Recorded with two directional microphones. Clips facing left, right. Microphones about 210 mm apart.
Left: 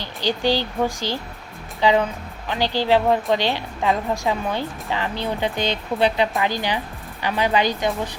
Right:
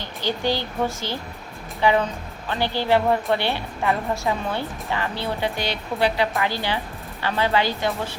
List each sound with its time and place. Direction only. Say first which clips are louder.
0.0 s a woman's voice: left 3 dB; 15° left (ahead or behind)